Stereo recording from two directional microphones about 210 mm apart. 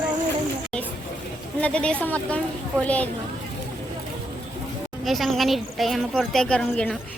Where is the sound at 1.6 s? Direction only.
5° left (ahead or behind).